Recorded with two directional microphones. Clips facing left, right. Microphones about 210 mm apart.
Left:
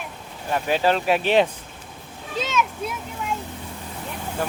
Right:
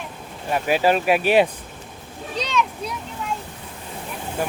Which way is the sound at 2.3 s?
5° left (ahead or behind).